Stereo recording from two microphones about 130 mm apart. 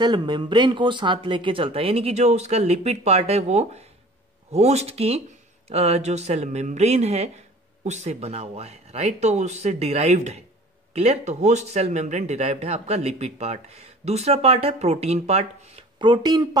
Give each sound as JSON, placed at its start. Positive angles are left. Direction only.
{"t": 0.0, "sound": "speech", "side_deg": -35}
{"t": 16.0, "sound": "speech", "side_deg": -35}